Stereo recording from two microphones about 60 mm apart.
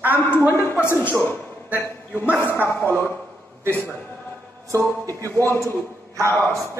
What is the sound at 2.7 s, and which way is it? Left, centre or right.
Speech, left.